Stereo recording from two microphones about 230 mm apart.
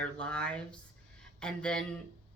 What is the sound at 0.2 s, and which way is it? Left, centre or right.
A woman's voice, centre.